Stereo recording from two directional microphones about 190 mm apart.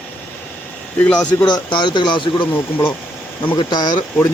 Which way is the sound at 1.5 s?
25° left (ahead or behind).